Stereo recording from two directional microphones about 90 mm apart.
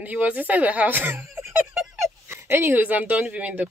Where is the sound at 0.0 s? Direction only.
15° right (ahead or behind).